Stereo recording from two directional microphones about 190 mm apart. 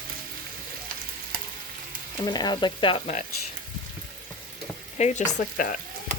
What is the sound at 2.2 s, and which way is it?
Speech, 20° left (ahead or behind).